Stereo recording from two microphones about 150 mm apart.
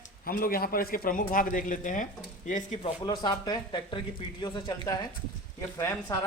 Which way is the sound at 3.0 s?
30° left (ahead or behind).